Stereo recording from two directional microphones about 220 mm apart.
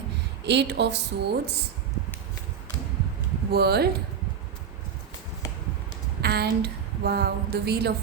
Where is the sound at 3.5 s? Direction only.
45° right (ahead or behind).